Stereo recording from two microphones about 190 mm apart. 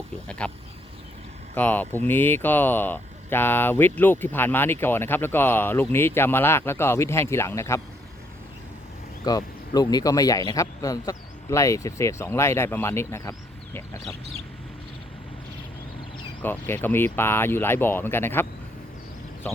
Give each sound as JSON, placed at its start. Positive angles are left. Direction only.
{"t": 0.3, "sound": "speech", "side_deg": 5}
{"t": 1.5, "sound": "speech", "side_deg": 10}
{"t": 9.2, "sound": "speech", "side_deg": 20}
{"t": 16.4, "sound": "speech", "side_deg": 10}
{"t": 19.4, "sound": "speech", "side_deg": 10}